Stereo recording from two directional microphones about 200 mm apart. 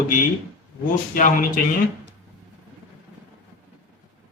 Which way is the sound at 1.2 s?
40° left (ahead or behind).